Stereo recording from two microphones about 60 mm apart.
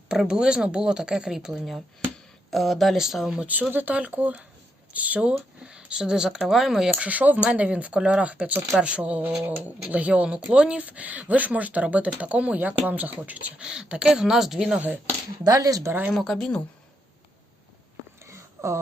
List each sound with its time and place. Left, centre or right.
0.1 s speech: centre
3.4 s speech: right
5.6 s speech: centre
6.9 s speech: right
13.7 s speech: centre
15.4 s speech: right
16.1 s speech: centre
18.2 s a sound: right